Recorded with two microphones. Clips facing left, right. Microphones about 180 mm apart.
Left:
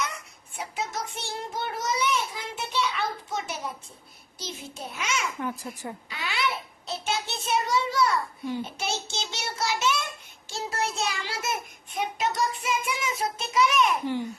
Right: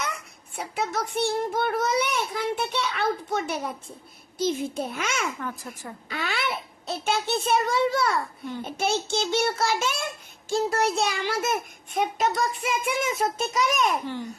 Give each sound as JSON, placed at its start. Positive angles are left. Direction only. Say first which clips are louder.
{"t": 0.5, "sound": "a child's voice", "louder": "right 4 dB", "side_deg": -60}
{"t": 5.4, "sound": "a child's voice", "louder": "left 2 dB", "side_deg": 15}
{"t": 6.1, "sound": "a child's voice", "louder": "right 2 dB", "side_deg": -50}
{"t": 14.0, "sound": "a child's voice", "louder": "left 3 dB", "side_deg": 15}